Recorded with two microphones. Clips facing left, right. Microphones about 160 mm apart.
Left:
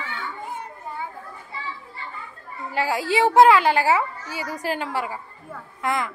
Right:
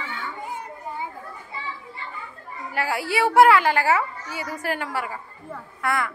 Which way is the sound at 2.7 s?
15° left (ahead or behind).